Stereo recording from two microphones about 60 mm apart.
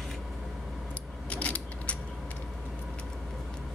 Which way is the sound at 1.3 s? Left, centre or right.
Left.